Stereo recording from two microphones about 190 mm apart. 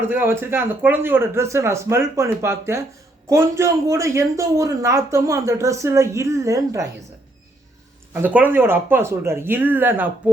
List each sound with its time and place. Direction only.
0.0 s speech: 10° right (ahead or behind)
8.1 s speech: 10° right (ahead or behind)